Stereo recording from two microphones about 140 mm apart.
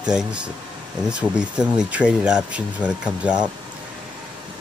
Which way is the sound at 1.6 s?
5° right (ahead or behind).